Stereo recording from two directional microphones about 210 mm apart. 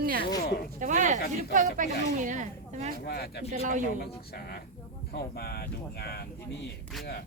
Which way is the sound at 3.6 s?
35° right (ahead or behind).